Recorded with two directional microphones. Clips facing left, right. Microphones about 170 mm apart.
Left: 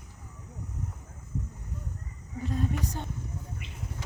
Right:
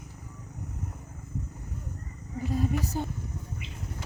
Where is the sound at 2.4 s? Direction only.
5° right (ahead or behind).